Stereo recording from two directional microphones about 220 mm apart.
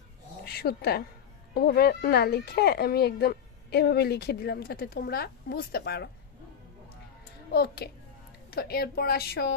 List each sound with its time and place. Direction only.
0.5 s speech: 45° left (ahead or behind)
7.5 s speech: 45° left (ahead or behind)